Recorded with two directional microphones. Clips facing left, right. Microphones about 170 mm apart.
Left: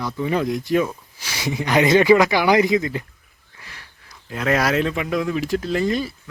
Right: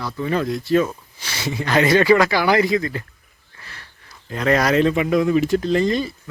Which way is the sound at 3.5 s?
10° left (ahead or behind).